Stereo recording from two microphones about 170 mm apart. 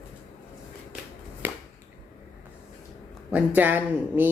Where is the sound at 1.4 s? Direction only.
10° right (ahead or behind).